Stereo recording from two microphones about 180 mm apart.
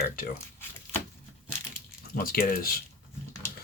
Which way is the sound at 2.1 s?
55° left (ahead or behind).